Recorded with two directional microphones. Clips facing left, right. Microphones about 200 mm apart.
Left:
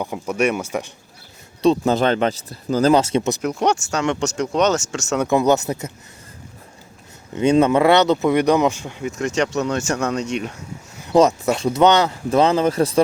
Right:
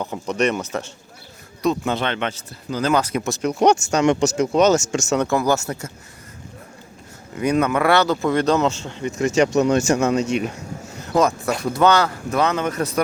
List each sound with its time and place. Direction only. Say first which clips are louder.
0.0 s speech: left 1 dB; 10° left (ahead or behind)
1.6 s speech: left 5 dB; 35° left (ahead or behind)
2.9 s speech: left 4 dB; 25° left (ahead or behind)
3.9 s speech: right 4 dB; 15° right (ahead or behind)
5.3 s speech: left 3 dB; 20° left (ahead or behind)
7.3 s speech: left 4 dB; 25° left (ahead or behind)
9.1 s speech: right 4 dB; 5° right (ahead or behind)
11.1 s speech: left 4 dB; 25° left (ahead or behind)